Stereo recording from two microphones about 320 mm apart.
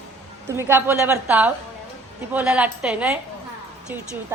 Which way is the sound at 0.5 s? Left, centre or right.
Centre.